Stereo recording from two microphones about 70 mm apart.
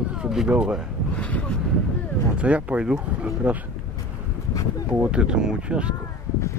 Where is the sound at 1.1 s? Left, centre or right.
Centre.